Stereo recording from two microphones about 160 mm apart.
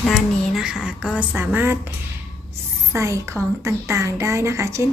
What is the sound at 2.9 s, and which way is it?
A woman's voice, 20° right (ahead or behind).